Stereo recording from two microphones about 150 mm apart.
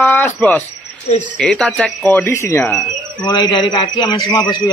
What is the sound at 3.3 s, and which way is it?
A man's voice, 30° left (ahead or behind).